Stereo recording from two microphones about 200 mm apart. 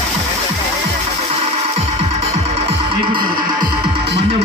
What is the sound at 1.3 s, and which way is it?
Music, 30° right (ahead or behind).